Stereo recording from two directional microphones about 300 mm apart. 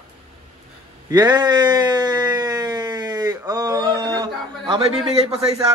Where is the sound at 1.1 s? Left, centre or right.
Centre.